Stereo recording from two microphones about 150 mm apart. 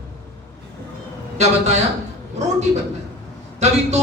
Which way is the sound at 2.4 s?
50° right (ahead or behind).